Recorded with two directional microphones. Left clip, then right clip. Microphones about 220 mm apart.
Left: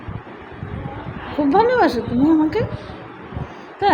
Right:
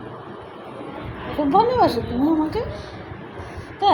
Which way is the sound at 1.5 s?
40° left (ahead or behind).